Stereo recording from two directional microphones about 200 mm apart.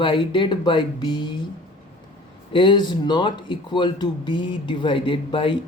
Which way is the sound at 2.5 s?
25° left (ahead or behind).